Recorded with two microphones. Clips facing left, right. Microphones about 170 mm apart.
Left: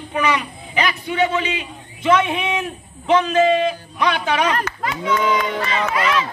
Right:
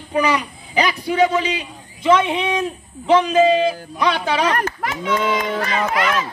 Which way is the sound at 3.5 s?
35° right (ahead or behind).